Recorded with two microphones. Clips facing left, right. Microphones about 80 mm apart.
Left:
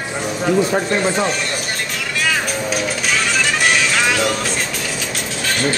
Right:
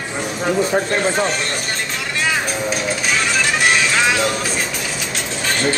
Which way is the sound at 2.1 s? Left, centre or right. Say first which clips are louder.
Even; right.